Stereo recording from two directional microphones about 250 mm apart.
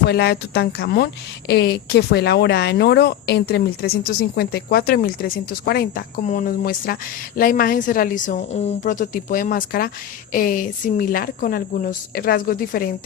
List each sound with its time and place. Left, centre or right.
0.1 s a woman's voice: left